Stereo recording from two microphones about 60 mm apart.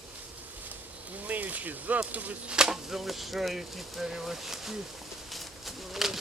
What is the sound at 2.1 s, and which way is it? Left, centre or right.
Chop, right.